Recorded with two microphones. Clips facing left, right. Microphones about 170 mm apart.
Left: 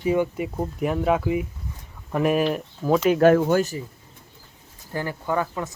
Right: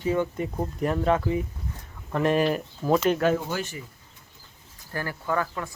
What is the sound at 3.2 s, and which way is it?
Speech, 55° left (ahead or behind).